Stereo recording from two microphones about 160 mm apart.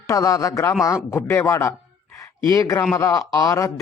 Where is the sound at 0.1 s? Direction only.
20° left (ahead or behind).